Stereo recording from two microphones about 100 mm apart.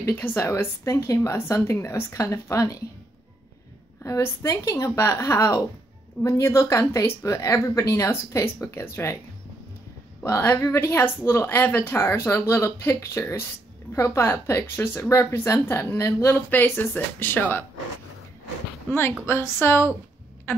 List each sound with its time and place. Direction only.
0.0 s speech: 20° left (ahead or behind)
4.0 s speech: 30° left (ahead or behind)
10.2 s speech: 25° left (ahead or behind)
19.2 s speech: 25° left (ahead or behind)
20.5 s a sound: 20° left (ahead or behind)